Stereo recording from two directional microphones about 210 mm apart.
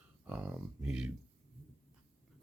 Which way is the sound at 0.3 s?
10° right (ahead or behind).